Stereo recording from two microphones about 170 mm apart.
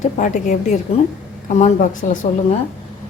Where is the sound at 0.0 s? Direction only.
45° left (ahead or behind).